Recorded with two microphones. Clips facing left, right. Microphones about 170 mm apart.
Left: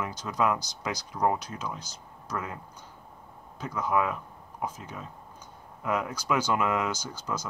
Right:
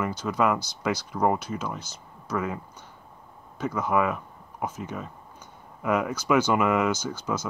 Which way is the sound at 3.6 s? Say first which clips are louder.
Right 3 dB; 5° right (ahead or behind).